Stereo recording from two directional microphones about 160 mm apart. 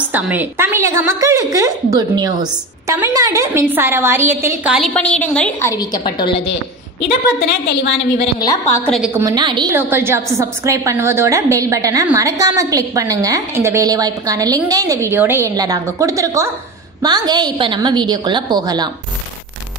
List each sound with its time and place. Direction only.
0.1 s a woman's voice: 10° right (ahead or behind)
4.7 s a woman's voice: 5° left (ahead or behind)
5.7 s a woman's voice: 25° left (ahead or behind)
7.0 s a woman's voice: 90° left
9.1 s a woman's voice: 20° right (ahead or behind)
9.8 s a woman's voice: 15° right (ahead or behind)